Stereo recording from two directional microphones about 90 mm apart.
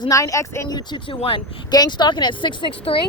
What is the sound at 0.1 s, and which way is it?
Speech, 35° left (ahead or behind).